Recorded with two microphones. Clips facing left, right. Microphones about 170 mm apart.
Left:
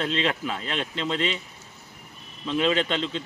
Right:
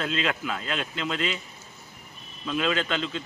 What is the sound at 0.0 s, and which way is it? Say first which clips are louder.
Speech: left 2 dB; 30° left (ahead or behind).